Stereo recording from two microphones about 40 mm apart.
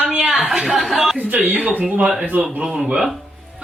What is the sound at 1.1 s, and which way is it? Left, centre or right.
Speech, right.